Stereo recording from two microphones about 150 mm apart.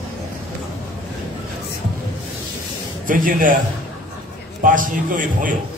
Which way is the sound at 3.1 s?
65° right (ahead or behind).